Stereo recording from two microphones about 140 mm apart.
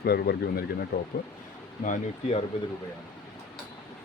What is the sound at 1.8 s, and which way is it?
Speech, 70° left (ahead or behind).